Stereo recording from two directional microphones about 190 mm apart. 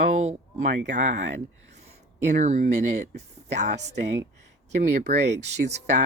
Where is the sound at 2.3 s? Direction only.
40° right (ahead or behind).